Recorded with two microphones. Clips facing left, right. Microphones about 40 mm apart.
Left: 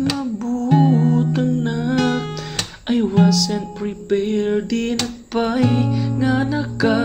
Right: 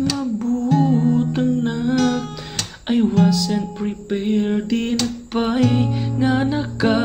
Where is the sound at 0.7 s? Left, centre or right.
Left.